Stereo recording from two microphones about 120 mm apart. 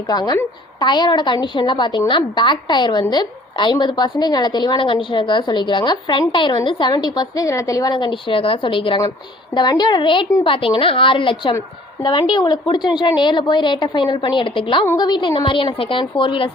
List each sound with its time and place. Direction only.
0.1 s a woman's voice: 35° left (ahead or behind)
7.9 s a woman's voice: 45° left (ahead or behind)
15.4 s a woman's voice: 45° left (ahead or behind)